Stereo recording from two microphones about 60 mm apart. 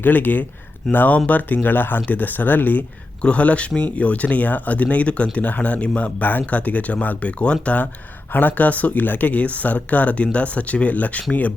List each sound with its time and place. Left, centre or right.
0.0 s speech: left